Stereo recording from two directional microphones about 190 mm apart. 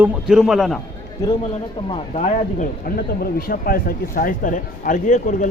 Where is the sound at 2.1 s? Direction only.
40° left (ahead or behind).